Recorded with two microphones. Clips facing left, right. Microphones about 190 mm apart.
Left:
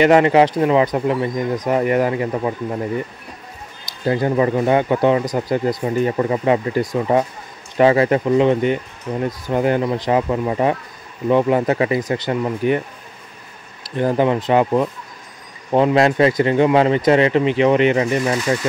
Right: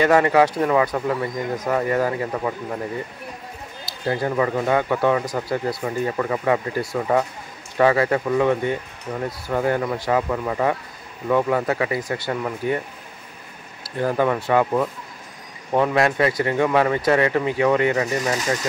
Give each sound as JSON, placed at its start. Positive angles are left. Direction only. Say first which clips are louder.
{"t": 0.0, "sound": "speech", "louder": "left 4 dB", "side_deg": 20}
{"t": 4.0, "sound": "speech", "louder": "left 4 dB", "side_deg": 20}
{"t": 13.8, "sound": "speech", "louder": "left 4 dB", "side_deg": 25}